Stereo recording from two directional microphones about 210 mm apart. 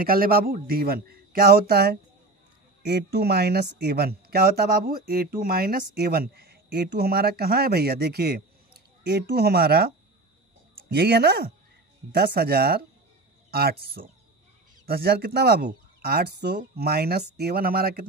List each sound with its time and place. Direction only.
0.0 s speech: 45° right (ahead or behind)
10.9 s speech: 50° right (ahead or behind)